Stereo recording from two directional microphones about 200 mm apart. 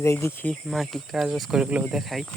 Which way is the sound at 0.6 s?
Centre (ahead or behind).